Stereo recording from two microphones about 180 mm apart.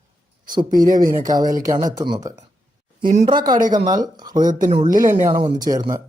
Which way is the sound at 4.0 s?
20° right (ahead or behind).